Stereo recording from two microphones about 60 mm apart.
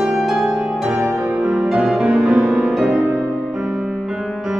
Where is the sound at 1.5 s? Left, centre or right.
Centre.